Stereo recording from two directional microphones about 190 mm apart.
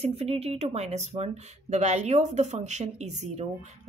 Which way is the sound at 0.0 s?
30° right (ahead or behind).